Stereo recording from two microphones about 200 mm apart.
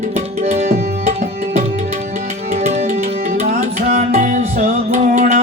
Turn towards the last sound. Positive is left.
turn(degrees=-40)  # may be behind; listen again after turning